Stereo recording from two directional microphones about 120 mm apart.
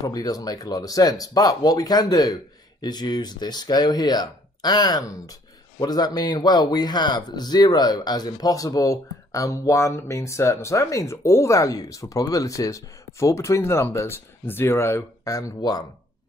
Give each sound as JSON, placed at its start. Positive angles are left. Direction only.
{"t": 0.0, "sound": "speech", "side_deg": 30}